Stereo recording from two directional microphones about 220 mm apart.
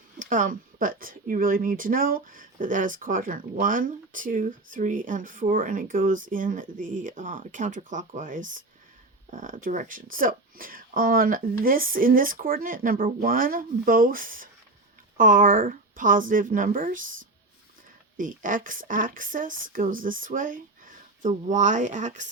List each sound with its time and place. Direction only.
0.2 s speech: 35° right (ahead or behind)
18.2 s speech: 35° right (ahead or behind)